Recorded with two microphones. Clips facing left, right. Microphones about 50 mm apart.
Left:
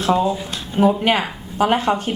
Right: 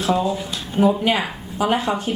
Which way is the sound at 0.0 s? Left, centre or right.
Left.